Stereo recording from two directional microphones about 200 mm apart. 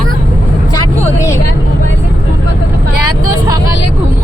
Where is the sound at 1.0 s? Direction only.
15° left (ahead or behind).